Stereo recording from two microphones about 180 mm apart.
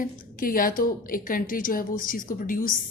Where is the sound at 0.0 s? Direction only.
50° left (ahead or behind).